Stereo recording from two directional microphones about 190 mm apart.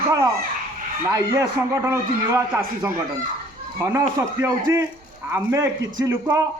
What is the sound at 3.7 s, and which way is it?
Speech, 15° right (ahead or behind).